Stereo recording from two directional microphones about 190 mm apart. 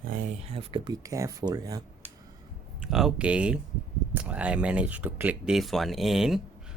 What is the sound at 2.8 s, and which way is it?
Speech, centre (ahead or behind).